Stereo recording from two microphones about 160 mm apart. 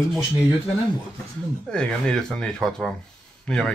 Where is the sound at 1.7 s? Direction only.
5° left (ahead or behind).